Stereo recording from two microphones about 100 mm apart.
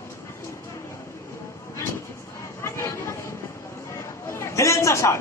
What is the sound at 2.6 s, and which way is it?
Chatter, 25° left (ahead or behind).